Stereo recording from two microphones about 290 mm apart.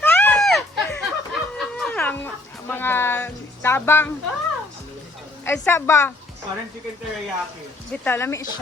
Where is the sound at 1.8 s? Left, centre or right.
Centre.